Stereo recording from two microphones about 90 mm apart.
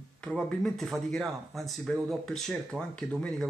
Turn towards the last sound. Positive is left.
turn(degrees=10)  # may be behind; listen again after turning